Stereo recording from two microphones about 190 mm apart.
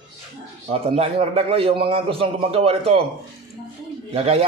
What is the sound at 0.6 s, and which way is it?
A man's voice, 30° right (ahead or behind).